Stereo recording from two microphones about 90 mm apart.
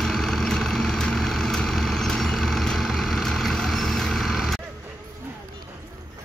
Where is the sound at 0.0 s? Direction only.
Centre (ahead or behind).